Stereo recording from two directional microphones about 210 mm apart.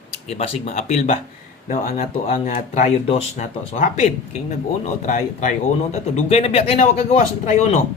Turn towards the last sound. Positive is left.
turn(degrees=35)  # may be behind; listen again after turning